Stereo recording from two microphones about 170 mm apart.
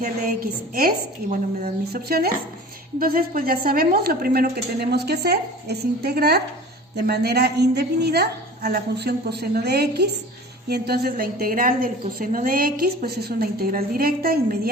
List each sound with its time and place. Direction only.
0.0 s a woman's voice: 60° right (ahead or behind)